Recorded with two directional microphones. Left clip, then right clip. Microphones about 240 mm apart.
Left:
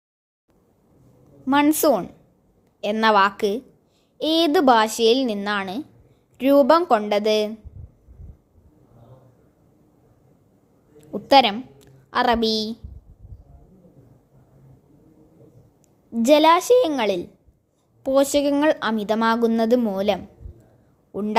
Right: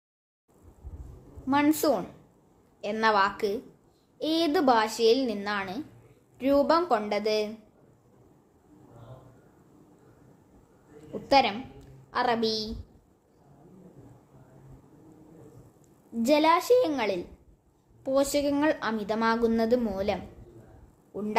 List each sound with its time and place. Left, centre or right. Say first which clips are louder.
1.5 s speech: left 7 dB; left
11.1 s a sound: left 7 dB; left
16.2 s speech: left 8 dB; left